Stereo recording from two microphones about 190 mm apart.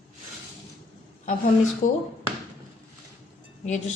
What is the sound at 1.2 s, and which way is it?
Speech, 40° left (ahead or behind).